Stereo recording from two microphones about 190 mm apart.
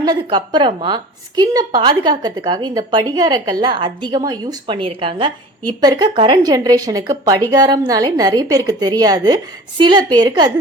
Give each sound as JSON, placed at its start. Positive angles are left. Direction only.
{"t": 0.0, "sound": "a woman's voice", "side_deg": -25}